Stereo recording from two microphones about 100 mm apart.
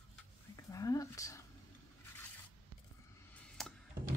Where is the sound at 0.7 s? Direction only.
35° left (ahead or behind).